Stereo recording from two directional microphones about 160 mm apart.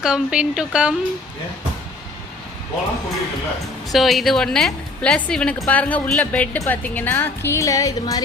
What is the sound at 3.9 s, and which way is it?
A woman's voice, centre (ahead or behind).